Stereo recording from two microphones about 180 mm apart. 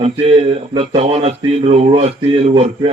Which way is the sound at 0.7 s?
30° right (ahead or behind).